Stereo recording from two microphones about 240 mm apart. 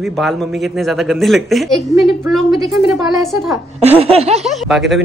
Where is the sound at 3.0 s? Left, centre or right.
Centre.